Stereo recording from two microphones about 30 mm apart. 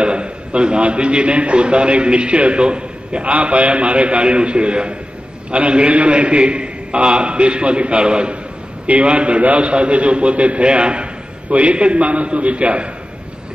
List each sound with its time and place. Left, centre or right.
0.0 s a man's voice: right
3.3 s a man's voice: right